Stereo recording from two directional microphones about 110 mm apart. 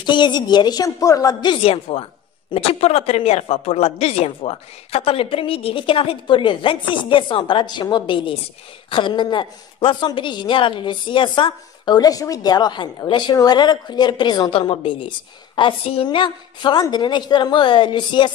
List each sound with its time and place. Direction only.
0.0 s a woman's voice: 45° left (ahead or behind)
1.6 s a woman's voice: 60° left (ahead or behind); by 14.5 s 40° left (ahead or behind)
14.5 s a woman's voice: 50° left (ahead or behind)